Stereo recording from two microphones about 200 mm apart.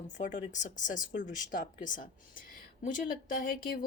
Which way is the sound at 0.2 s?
40° left (ahead or behind).